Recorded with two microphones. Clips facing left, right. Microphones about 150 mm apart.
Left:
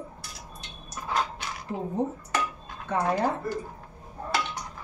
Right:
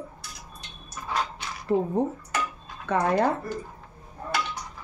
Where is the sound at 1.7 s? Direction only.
55° right (ahead or behind).